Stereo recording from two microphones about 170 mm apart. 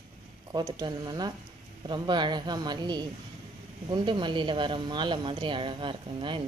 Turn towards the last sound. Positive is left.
turn(degrees=-30)  # may be behind; listen again after turning